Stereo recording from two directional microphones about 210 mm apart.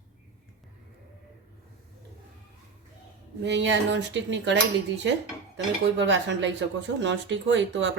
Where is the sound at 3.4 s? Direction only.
60° right (ahead or behind).